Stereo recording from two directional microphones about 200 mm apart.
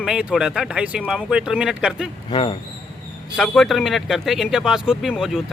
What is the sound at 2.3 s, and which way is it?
Speech, 25° left (ahead or behind).